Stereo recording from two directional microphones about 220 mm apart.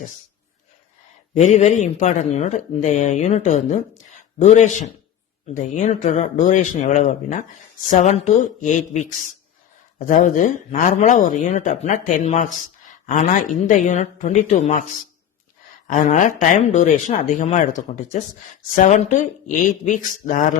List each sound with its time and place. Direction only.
1.3 s speech: 30° left (ahead or behind)
10.1 s speech: 35° left (ahead or behind)
15.9 s speech: 35° left (ahead or behind)